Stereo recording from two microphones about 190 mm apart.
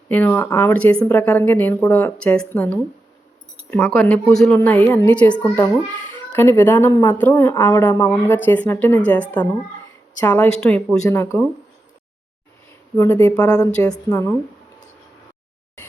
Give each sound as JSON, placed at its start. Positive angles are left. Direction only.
{"t": 0.1, "sound": "a child's voice", "side_deg": 10}
{"t": 13.0, "sound": "a child's voice", "side_deg": 10}
{"t": 13.8, "sound": "a woman's voice", "side_deg": 20}